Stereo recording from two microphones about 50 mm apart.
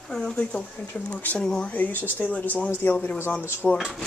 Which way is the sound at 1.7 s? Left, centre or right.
Left.